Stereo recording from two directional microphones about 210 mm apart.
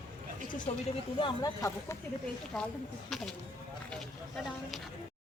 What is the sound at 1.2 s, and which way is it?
Speech, 15° left (ahead or behind).